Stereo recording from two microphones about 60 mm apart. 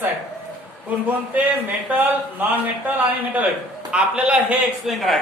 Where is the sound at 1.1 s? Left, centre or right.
Right.